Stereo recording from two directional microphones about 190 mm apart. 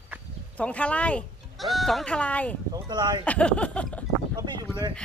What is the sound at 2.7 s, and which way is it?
Speech, 20° right (ahead or behind).